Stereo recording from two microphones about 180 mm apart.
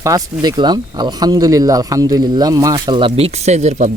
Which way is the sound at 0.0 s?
20° right (ahead or behind).